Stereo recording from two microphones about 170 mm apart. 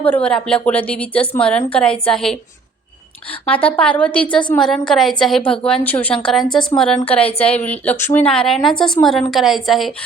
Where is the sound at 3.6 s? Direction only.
10° left (ahead or behind).